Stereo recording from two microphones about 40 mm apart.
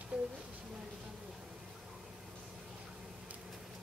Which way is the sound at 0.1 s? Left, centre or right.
Centre.